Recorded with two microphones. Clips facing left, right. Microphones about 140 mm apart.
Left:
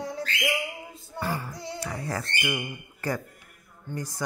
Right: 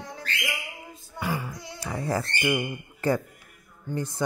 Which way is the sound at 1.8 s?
25° right (ahead or behind).